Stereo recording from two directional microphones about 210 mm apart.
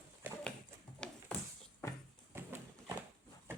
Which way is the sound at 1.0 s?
5° left (ahead or behind).